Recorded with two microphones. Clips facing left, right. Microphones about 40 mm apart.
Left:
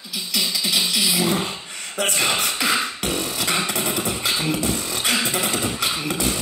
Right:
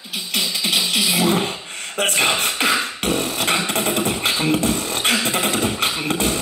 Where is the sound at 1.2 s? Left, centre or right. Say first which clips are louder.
Right 3 dB; right.